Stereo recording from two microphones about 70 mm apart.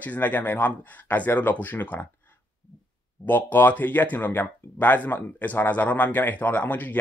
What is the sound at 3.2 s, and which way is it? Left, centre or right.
Speech, left.